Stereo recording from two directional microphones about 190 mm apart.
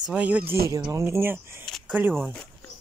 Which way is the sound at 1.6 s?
Centre (ahead or behind).